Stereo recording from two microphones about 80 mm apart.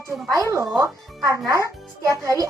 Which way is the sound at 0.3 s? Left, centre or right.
Right.